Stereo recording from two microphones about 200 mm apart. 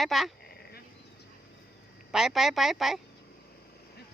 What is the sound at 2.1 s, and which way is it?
Speech, centre (ahead or behind).